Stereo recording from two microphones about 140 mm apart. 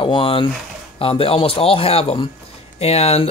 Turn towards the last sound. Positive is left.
turn(degrees=45)  # may be behind; listen again after turning